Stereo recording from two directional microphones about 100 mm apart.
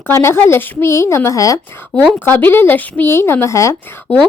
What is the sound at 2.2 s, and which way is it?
Speech, 20° left (ahead or behind).